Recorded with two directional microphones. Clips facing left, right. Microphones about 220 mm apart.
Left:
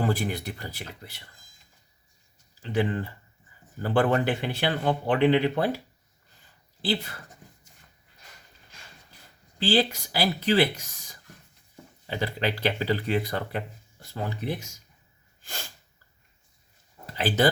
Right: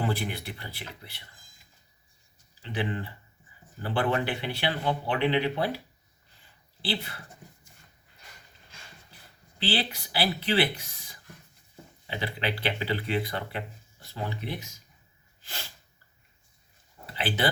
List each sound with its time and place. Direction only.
0.0 s speech: 45° left (ahead or behind)
2.6 s speech: 45° left (ahead or behind)
6.8 s speech: 45° left (ahead or behind)
9.6 s speech: 45° left (ahead or behind)
15.4 s sneeze: 45° left (ahead or behind)
17.2 s speech: 45° left (ahead or behind)